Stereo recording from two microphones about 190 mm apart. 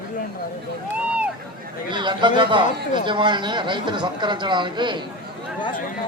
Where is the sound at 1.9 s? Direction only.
25° right (ahead or behind).